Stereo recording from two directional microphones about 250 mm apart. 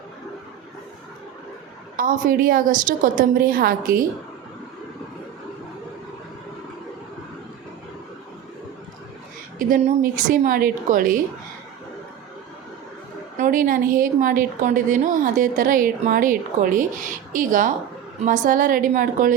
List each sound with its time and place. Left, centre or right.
2.0 s a woman's voice: right
9.6 s a woman's voice: right
13.4 s a woman's voice: right